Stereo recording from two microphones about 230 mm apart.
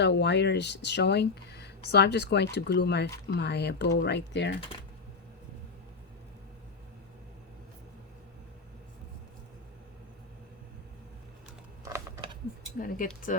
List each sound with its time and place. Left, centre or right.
0.0 s speech: left
11.9 s a sound: centre
12.8 s speech: left